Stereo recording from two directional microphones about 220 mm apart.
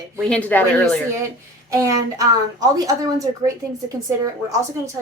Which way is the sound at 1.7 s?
15° right (ahead or behind).